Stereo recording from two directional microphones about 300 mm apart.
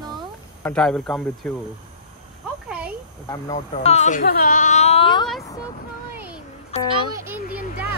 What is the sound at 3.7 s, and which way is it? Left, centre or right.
Speech, left.